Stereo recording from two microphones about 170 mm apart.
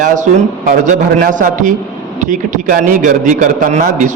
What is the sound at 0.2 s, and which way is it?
A man's voice, 50° right (ahead or behind).